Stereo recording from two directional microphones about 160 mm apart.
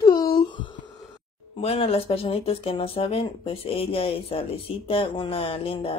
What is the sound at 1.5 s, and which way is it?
Speech, 40° left (ahead or behind).